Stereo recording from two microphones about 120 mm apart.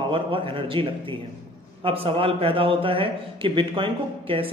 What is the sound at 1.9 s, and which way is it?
Speech, 50° right (ahead or behind).